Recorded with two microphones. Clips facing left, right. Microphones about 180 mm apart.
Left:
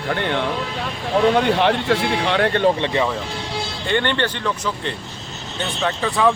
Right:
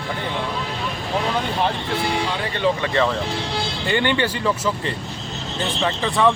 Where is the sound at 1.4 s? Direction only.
75° left (ahead or behind).